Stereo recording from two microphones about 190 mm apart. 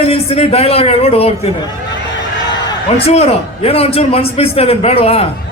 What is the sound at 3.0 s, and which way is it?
A man's voice, 30° left (ahead or behind).